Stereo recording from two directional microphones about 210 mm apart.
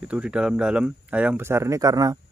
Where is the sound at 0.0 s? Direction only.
5° right (ahead or behind).